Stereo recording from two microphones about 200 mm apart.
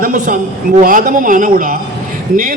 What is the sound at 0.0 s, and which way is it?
A man's voice, 45° right (ahead or behind).